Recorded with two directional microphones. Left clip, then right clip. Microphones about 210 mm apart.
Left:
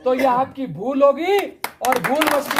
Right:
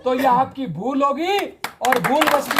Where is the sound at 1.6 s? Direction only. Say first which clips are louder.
Right 1 dB; 10° left (ahead or behind).